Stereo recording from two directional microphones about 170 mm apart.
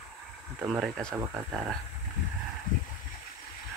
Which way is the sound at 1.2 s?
20° right (ahead or behind).